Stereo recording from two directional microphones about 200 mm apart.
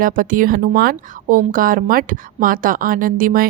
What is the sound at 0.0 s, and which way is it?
Speech, 45° right (ahead or behind).